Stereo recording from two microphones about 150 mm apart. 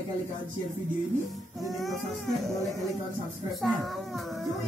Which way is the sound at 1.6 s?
Centre (ahead or behind).